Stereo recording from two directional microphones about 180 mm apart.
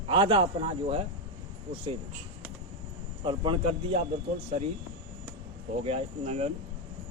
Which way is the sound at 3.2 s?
25° right (ahead or behind).